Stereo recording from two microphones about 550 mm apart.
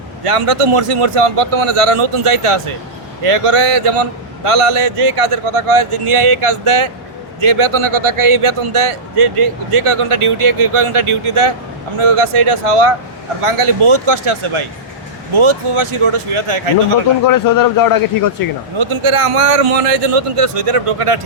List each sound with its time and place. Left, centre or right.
0.3 s a man's voice: right
17.2 s a man's voice: left
18.8 s a man's voice: right